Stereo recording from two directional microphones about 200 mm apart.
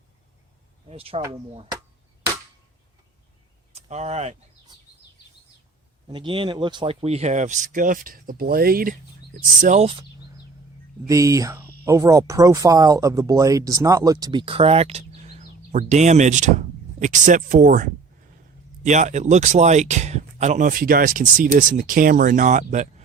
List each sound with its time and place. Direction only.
0.9 s speech: 30° right (ahead or behind)
3.8 s speech: 35° right (ahead or behind)
6.1 s speech: 25° right (ahead or behind)
11.1 s speech: 15° right (ahead or behind); by 23.0 s 35° right (ahead or behind)